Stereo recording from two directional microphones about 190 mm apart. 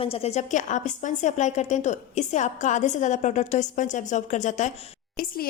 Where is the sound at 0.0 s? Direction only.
30° left (ahead or behind).